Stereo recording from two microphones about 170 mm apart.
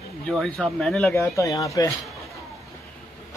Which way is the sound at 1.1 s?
15° left (ahead or behind).